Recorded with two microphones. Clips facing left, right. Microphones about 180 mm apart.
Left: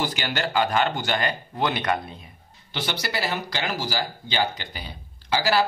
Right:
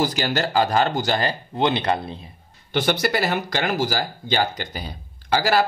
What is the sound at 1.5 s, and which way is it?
Speech, 25° right (ahead or behind).